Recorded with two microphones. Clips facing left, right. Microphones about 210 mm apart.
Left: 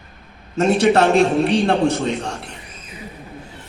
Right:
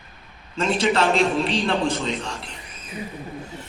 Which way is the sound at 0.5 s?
65° left (ahead or behind).